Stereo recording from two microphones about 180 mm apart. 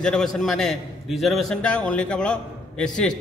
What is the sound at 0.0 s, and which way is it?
A man's voice, 5° left (ahead or behind).